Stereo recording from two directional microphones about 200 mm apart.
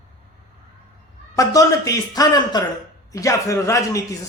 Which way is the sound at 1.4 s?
15° left (ahead or behind).